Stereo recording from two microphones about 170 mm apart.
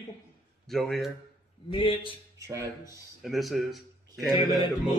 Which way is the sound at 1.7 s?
30° left (ahead or behind).